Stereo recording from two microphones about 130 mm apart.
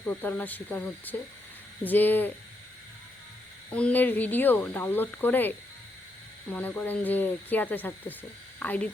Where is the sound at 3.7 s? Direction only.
10° left (ahead or behind).